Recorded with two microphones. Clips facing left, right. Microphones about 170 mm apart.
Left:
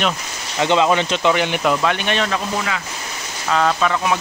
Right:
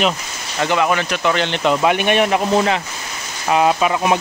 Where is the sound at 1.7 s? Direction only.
15° right (ahead or behind).